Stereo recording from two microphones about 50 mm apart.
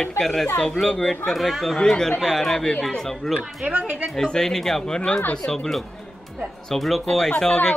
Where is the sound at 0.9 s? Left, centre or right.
Centre.